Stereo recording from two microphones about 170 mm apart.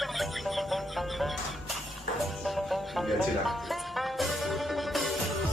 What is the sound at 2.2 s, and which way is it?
Music, centre (ahead or behind).